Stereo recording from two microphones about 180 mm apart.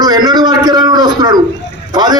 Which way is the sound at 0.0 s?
25° right (ahead or behind).